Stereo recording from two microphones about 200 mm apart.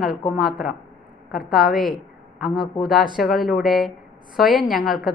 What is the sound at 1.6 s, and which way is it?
Speech, 45° left (ahead or behind).